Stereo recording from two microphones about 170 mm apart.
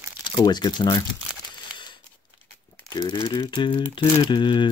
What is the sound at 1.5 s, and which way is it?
Scissors, 25° left (ahead or behind).